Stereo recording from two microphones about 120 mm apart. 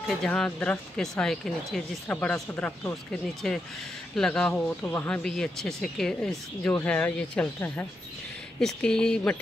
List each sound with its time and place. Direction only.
0.1 s speech: 5° left (ahead or behind)
2.9 s speech: 5° left (ahead or behind)